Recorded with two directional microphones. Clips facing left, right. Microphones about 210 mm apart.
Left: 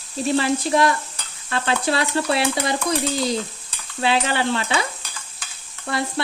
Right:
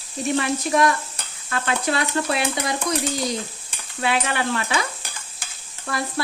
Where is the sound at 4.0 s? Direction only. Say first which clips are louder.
Left 2 dB; 30° left (ahead or behind).